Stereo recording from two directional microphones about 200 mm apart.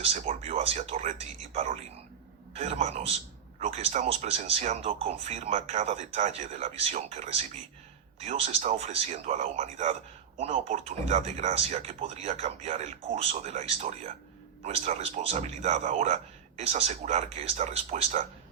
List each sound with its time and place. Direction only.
0.0 s a man's voice: 30° right (ahead or behind)